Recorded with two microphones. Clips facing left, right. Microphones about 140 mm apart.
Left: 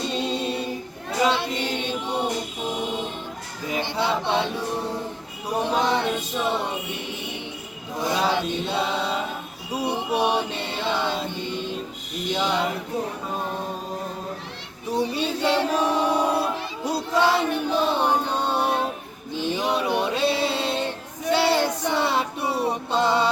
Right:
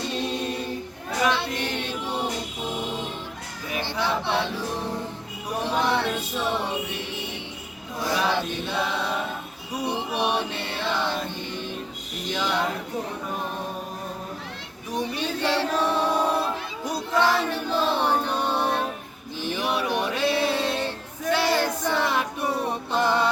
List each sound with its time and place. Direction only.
0.0 s a capella: 20° left (ahead or behind)
3.7 s a sound: 20° left (ahead or behind)
4.0 s choir: 15° left (ahead or behind)
5.7 s music: 15° left (ahead or behind)
7.9 s chant: 20° left (ahead or behind)
10.2 s music: 15° left (ahead or behind)
12.3 s a sound: 15° left (ahead or behind)
14.9 s choir: 15° left (ahead or behind)
17.2 s music: 15° left (ahead or behind)